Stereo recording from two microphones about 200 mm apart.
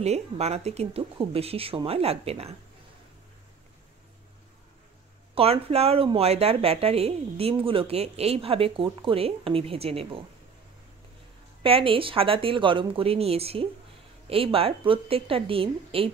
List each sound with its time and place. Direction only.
0.0 s a woman's voice: 30° right (ahead or behind)
5.3 s a woman's voice: 30° right (ahead or behind)
11.6 s a woman's voice: 25° right (ahead or behind)